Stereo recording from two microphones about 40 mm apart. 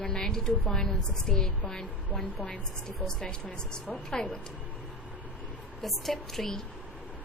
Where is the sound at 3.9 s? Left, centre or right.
Centre.